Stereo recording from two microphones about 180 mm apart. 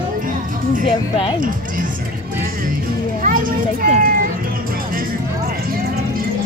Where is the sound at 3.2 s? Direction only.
50° right (ahead or behind).